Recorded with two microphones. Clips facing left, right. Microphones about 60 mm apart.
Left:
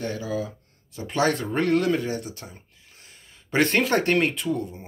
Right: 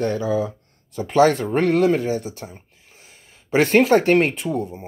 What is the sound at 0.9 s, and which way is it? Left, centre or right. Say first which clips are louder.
Speech: right 8 dB; right.